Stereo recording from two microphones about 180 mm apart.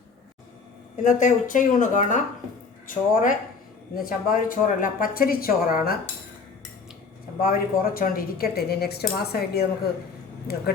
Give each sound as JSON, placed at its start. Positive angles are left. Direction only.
{"t": 1.0, "sound": "a woman's voice", "side_deg": 45}
{"t": 7.4, "sound": "a woman's voice", "side_deg": 50}